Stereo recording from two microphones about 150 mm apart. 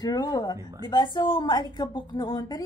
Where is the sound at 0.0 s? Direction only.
25° left (ahead or behind).